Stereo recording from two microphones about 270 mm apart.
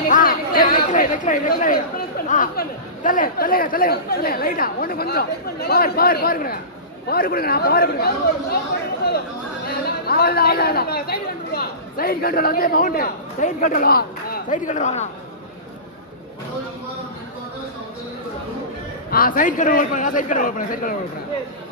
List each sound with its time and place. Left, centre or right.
0.1 s speech: left
9.8 s speech: left
19.0 s a man's voice: left